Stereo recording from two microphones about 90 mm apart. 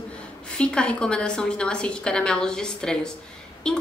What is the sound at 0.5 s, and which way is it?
A woman's voice, 10° left (ahead or behind).